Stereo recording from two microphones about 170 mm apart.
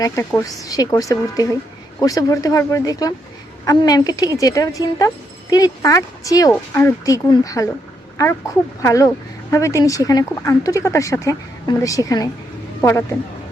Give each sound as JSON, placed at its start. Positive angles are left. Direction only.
{"t": 0.0, "sound": "speech", "side_deg": 15}
{"t": 8.8, "sound": "speech", "side_deg": 20}